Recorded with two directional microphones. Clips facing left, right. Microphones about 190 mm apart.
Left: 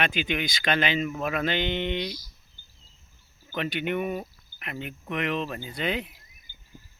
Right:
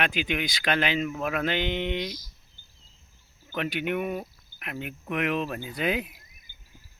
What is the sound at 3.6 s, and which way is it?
Speech, centre (ahead or behind).